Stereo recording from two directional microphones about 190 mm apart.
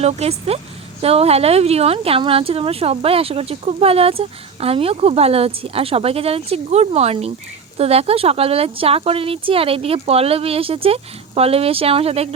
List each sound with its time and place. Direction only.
0.0 s a woman's voice: 35° right (ahead or behind)